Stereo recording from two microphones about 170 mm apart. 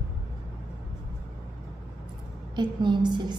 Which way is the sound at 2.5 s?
25° right (ahead or behind).